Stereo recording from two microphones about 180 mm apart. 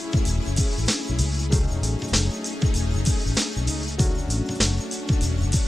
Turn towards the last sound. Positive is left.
turn(degrees=0)  # may be behind; listen again after turning